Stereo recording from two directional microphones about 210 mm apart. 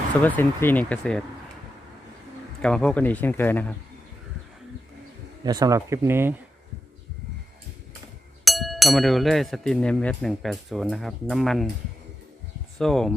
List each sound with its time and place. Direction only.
0.2 s speech: 10° left (ahead or behind)
2.6 s speech: 5° left (ahead or behind)
5.4 s speech: 20° right (ahead or behind)
8.4 s speech: centre (ahead or behind)
12.8 s speech: centre (ahead or behind)